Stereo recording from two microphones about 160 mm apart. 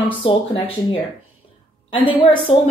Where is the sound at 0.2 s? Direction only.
35° left (ahead or behind).